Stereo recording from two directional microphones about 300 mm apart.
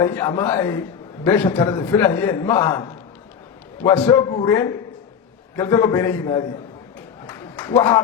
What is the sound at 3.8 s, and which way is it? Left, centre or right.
A man's voice, centre.